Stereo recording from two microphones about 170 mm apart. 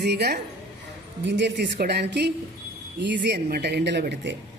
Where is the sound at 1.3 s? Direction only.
90° right.